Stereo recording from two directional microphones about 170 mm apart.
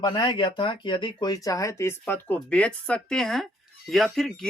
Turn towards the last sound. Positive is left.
turn(degrees=0)  # may be behind; listen again after turning